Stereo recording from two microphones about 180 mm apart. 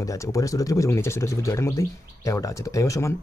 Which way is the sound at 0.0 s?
15° left (ahead or behind).